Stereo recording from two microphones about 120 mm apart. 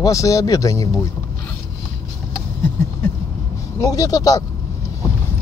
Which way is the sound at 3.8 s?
30° left (ahead or behind).